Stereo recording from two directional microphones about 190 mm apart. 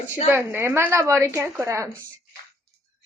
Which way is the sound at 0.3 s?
10° right (ahead or behind).